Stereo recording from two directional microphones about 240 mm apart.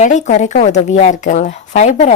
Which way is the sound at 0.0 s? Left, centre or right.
Left.